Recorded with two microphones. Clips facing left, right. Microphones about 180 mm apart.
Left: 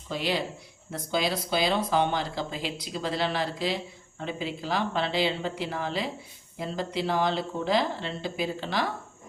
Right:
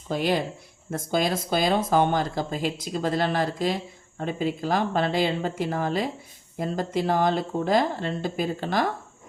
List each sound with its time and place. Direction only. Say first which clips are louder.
0.1 s speech: right 5 dB; 50° right (ahead or behind)